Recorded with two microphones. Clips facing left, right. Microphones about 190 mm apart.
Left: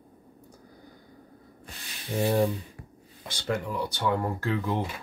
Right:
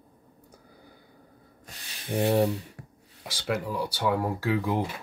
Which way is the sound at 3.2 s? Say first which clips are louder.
Even; 5° right (ahead or behind).